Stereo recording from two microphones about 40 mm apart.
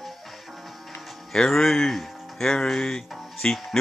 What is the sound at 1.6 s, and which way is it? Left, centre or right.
Speech, centre.